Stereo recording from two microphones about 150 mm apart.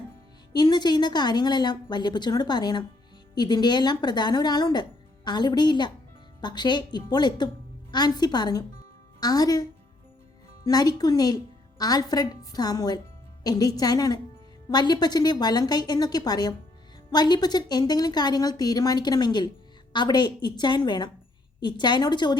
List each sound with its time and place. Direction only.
0.5 s speech: 30° left (ahead or behind)